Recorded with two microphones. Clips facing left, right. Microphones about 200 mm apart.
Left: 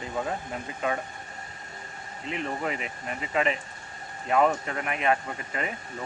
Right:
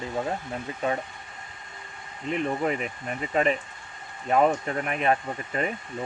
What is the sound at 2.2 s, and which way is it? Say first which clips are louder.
Speech: right 5 dB; 45° right (ahead or behind).